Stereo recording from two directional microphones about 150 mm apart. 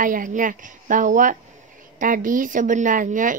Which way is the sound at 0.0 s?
60° right (ahead or behind).